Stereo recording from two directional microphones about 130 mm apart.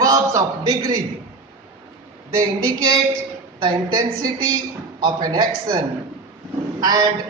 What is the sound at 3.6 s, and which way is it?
A man's voice, 35° right (ahead or behind).